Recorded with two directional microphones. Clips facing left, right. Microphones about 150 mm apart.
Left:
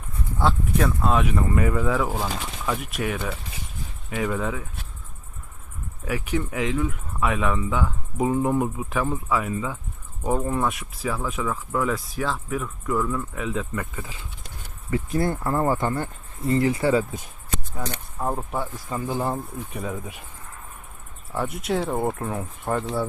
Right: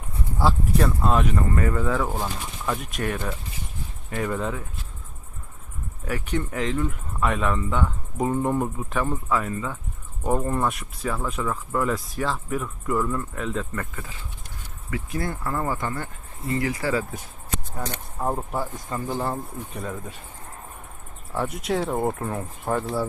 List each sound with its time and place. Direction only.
0.3 s speech: centre (ahead or behind)
6.1 s speech: 5° left (ahead or behind)
14.8 s speech: 30° left (ahead or behind)
17.7 s speech: 5° right (ahead or behind)
18.9 s speech: 15° left (ahead or behind)
21.3 s speech: centre (ahead or behind)